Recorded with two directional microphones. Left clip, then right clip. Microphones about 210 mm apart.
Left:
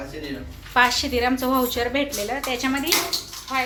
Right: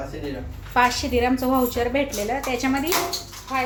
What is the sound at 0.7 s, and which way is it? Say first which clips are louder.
A woman's voice: left 1 dB; centre (ahead or behind).